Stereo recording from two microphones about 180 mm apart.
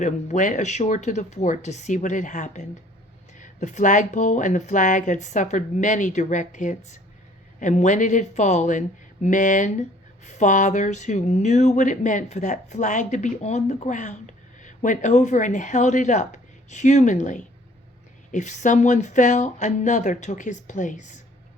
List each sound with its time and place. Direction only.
0.0 s speech: 45° left (ahead or behind)